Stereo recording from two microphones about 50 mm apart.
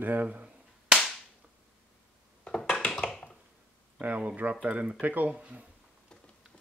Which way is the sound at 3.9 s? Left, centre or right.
Right.